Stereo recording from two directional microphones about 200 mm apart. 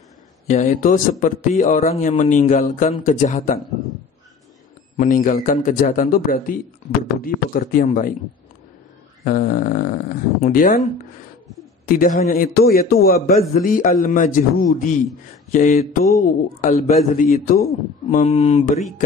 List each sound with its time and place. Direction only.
0.5 s speech: 35° left (ahead or behind)
4.9 s a man's voice: 40° left (ahead or behind)
9.2 s a man's voice: 45° left (ahead or behind)
11.8 s a man's voice: 45° left (ahead or behind)
18.1 s speech: 30° left (ahead or behind)